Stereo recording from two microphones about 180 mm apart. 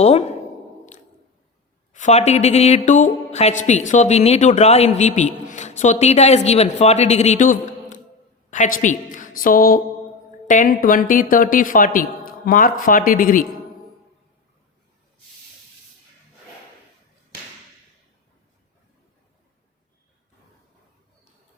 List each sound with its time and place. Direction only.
0.0 s a woman's voice: 35° left (ahead or behind)
1.9 s a woman's voice: 40° left (ahead or behind)